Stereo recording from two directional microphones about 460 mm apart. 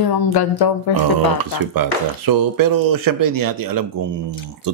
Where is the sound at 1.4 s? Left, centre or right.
Right.